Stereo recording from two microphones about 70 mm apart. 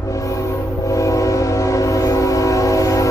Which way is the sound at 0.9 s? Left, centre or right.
Left.